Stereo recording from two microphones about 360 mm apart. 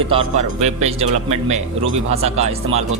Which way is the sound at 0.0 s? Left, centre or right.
Centre.